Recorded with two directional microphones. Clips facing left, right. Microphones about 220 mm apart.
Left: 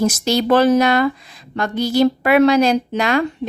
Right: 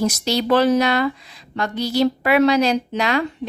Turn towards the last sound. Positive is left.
turn(degrees=50)  # may be behind; listen again after turning